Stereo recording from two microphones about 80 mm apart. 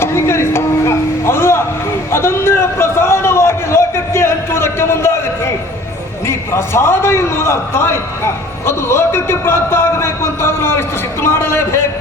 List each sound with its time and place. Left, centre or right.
0.0 s music: left
2.1 s a sound: left
6.2 s a man's voice: left